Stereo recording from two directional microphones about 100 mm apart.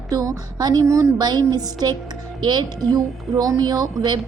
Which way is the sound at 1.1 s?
45° right (ahead or behind).